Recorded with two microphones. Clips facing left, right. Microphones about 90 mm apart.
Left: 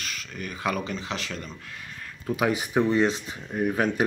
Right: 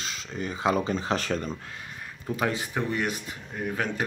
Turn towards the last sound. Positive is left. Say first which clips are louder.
# left 5 dB
turn(degrees=20)  # may be behind; listen again after turning